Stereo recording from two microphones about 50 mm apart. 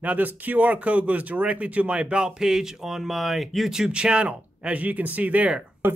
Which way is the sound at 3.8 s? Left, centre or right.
Centre.